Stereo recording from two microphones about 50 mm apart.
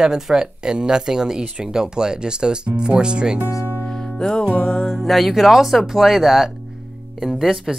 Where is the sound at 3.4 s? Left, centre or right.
Left.